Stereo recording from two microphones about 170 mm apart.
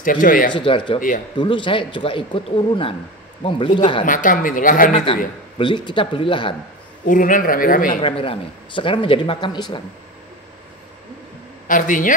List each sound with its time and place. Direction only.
0.0 s speech: 55° left (ahead or behind)
0.5 s speech: 30° left (ahead or behind)
0.9 s speech: 50° left (ahead or behind)
1.4 s speech: 30° left (ahead or behind)
4.0 s speech: 50° left (ahead or behind)
4.9 s speech: 30° left (ahead or behind)
7.1 s speech: 50° left (ahead or behind)
8.0 s speech: 30° left (ahead or behind)
11.6 s a man's voice: 50° left (ahead or behind)